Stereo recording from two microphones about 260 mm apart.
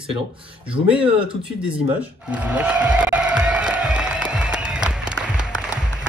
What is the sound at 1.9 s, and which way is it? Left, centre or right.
Music, centre.